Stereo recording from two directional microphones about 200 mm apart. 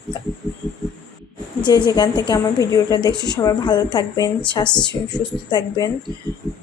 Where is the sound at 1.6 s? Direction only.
20° left (ahead or behind).